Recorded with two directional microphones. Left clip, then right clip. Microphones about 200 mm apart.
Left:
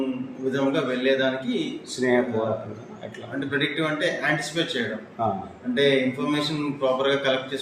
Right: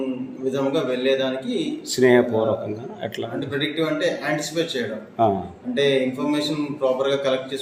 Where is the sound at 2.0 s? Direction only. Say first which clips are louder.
Right 6 dB; 60° right (ahead or behind).